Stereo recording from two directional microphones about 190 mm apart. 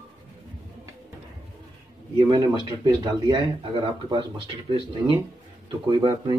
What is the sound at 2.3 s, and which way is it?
Speech, 20° right (ahead or behind).